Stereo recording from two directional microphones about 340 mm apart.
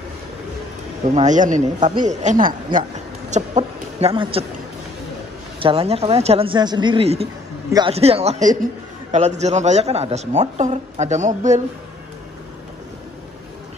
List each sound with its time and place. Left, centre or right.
1.1 s speech: right
5.6 s a woman's voice: centre